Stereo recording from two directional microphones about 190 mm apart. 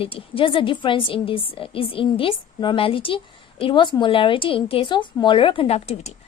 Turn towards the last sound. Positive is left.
turn(degrees=35)  # may be behind; listen again after turning